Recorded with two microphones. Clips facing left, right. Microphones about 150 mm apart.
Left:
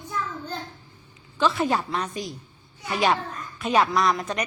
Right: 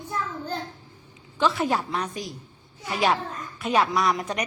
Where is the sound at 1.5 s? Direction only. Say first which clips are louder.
Left 1 dB; centre (ahead or behind).